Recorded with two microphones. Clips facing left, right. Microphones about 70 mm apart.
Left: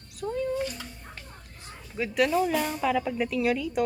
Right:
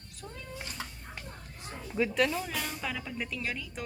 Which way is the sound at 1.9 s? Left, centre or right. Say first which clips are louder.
Left 4 dB; centre.